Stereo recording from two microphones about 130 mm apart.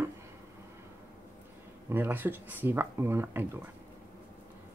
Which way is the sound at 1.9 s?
15° right (ahead or behind).